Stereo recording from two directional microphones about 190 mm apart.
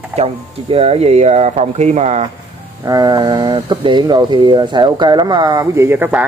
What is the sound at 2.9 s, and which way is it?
Speech, 20° right (ahead or behind).